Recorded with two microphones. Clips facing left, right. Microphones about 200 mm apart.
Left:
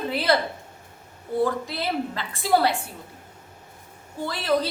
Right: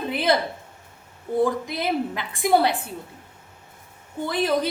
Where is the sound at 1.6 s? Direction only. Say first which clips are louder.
Right 2 dB; 20° right (ahead or behind).